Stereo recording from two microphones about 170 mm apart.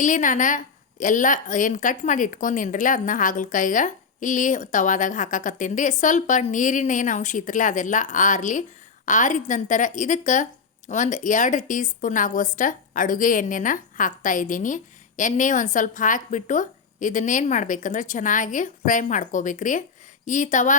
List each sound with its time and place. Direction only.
0.0 s a woman's voice: 50° left (ahead or behind)